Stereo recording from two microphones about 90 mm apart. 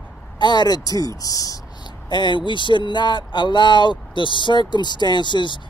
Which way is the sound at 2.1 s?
60° left (ahead or behind).